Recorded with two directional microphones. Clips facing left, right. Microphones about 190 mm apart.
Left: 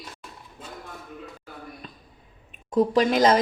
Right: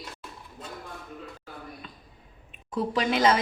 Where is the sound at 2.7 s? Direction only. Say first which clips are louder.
Left 6 dB; 45° left (ahead or behind).